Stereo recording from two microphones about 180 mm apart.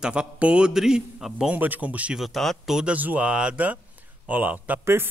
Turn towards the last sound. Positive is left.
turn(degrees=-10)  # may be behind; listen again after turning